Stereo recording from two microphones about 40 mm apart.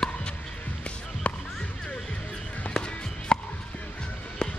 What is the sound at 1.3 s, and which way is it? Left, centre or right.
Music, left.